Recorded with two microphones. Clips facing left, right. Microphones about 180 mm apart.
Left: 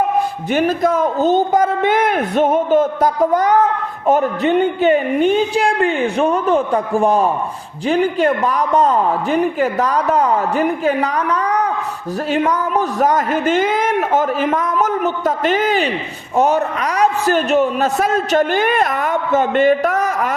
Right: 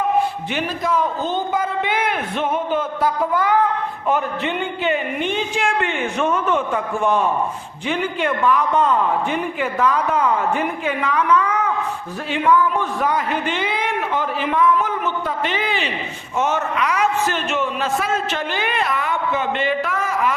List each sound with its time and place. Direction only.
0.5 s a man's voice: 45° left (ahead or behind)